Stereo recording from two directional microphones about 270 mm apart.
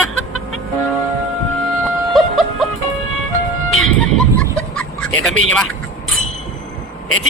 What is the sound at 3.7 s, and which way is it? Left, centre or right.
Vehicle, left.